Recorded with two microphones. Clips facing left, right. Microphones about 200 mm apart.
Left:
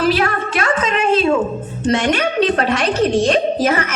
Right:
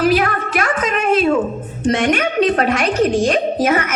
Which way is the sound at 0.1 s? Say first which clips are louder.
Right 1 dB; 25° left (ahead or behind).